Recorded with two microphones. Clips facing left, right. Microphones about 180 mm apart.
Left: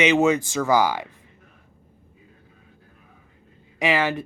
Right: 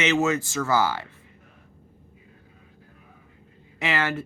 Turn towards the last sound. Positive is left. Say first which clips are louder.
# left 4 dB
turn(degrees=15)  # may be behind; listen again after turning